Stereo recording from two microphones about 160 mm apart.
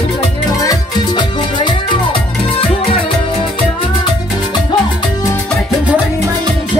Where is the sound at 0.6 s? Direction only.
25° left (ahead or behind).